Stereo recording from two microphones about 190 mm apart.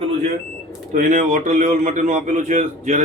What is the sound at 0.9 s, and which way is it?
A man's voice, 40° right (ahead or behind).